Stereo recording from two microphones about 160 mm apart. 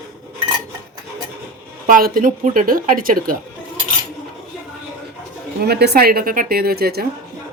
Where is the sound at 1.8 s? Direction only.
60° right (ahead or behind).